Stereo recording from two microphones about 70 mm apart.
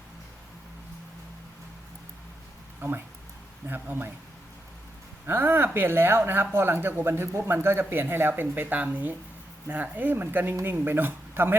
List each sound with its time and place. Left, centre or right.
2.8 s speech: right
5.2 s speech: right